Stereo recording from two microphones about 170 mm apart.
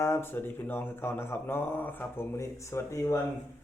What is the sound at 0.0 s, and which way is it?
Speech, 15° left (ahead or behind).